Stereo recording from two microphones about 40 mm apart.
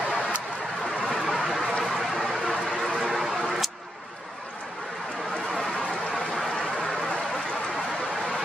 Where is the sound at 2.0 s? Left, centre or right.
Centre.